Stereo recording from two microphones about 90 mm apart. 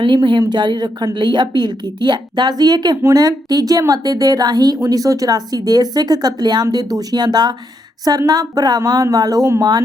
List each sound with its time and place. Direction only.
0.0 s a woman's voice: 60° right (ahead or behind); by 9.5 s 45° right (ahead or behind)